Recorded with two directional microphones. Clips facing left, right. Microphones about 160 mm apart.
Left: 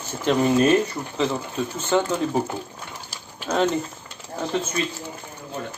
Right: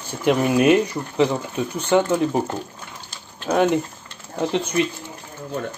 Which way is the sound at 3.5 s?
15° right (ahead or behind).